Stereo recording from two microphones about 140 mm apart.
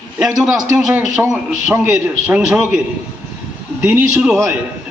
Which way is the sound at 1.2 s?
15° right (ahead or behind).